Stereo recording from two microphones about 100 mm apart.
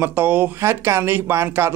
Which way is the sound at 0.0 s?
20° right (ahead or behind).